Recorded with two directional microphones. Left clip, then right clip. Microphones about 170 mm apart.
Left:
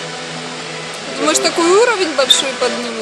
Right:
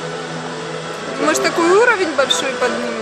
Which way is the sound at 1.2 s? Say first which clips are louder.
Left 1 dB; 20° left (ahead or behind).